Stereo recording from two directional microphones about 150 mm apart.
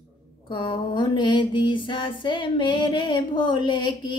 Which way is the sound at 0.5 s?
35° left (ahead or behind).